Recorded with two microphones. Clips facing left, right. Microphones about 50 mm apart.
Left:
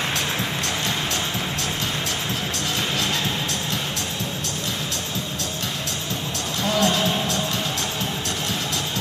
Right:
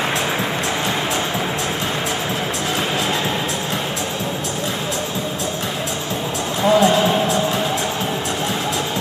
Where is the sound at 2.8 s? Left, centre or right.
Centre.